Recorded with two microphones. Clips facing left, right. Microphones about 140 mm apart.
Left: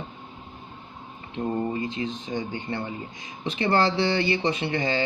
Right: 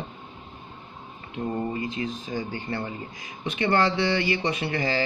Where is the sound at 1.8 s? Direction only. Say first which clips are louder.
Left 1 dB; 25° left (ahead or behind).